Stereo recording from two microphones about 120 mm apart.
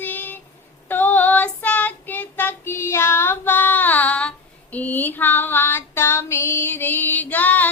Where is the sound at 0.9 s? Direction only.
15° left (ahead or behind).